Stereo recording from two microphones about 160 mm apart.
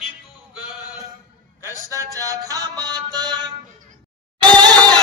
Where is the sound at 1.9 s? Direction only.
20° right (ahead or behind).